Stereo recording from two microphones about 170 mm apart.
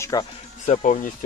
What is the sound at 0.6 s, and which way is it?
Speech, 45° left (ahead or behind).